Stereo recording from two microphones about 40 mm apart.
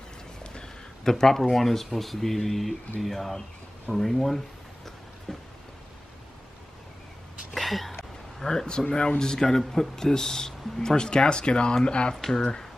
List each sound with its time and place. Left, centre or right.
1.0 s speech: centre
7.5 s a sound: centre
8.4 s speech: centre
12.2 s speech: centre